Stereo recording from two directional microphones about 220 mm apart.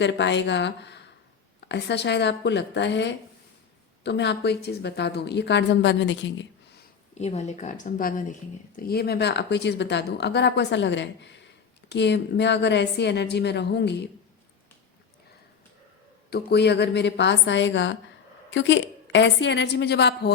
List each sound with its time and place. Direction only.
0.0 s speech: 55° left (ahead or behind)
7.2 s speech: 30° left (ahead or behind); by 14.1 s 50° left (ahead or behind)
16.3 s speech: 50° left (ahead or behind)